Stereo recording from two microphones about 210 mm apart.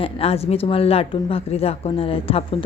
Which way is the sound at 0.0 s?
30° left (ahead or behind).